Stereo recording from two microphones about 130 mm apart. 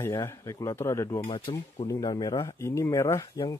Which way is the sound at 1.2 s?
40° left (ahead or behind).